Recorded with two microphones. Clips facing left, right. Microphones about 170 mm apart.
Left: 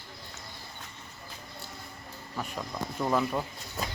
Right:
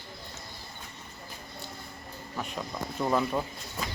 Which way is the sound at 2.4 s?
Centre (ahead or behind).